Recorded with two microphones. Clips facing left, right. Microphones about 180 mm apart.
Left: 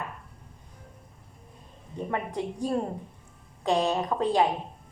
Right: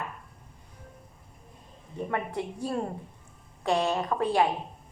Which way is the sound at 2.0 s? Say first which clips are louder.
Left 1 dB; 15° left (ahead or behind).